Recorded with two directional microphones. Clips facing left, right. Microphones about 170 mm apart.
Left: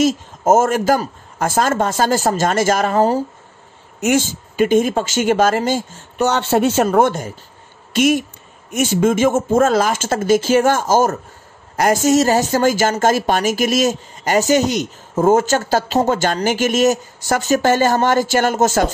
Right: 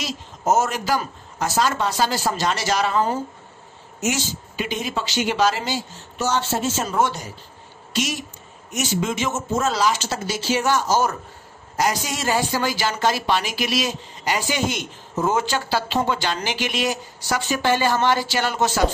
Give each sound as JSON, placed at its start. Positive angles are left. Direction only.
{"t": 0.0, "sound": "speech", "side_deg": 50}
{"t": 4.0, "sound": "speech", "side_deg": 50}